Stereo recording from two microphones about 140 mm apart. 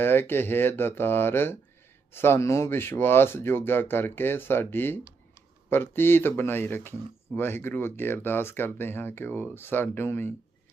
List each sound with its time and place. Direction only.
0.0 s speech: 15° left (ahead or behind)